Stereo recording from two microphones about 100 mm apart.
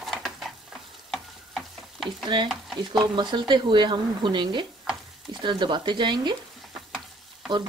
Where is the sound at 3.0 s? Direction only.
50° right (ahead or behind).